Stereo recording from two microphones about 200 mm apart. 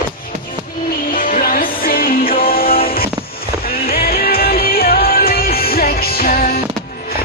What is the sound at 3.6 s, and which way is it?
Music, 50° left (ahead or behind).